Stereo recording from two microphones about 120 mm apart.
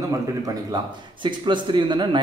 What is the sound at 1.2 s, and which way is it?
Speech, 40° right (ahead or behind).